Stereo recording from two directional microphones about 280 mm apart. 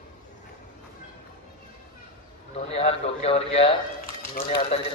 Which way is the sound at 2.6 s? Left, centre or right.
Left.